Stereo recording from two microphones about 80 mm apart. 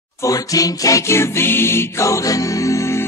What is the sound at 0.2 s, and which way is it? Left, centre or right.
Music, left.